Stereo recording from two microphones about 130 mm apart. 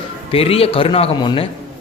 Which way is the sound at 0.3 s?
50° left (ahead or behind).